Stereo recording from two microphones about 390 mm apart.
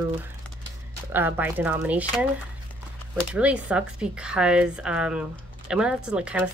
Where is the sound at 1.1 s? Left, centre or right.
Centre.